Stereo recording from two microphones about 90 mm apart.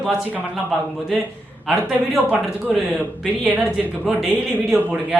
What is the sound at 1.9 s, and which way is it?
Speech, 15° right (ahead or behind).